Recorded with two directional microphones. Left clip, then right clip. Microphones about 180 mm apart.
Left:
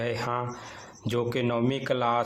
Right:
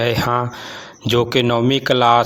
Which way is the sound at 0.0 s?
45° right (ahead or behind).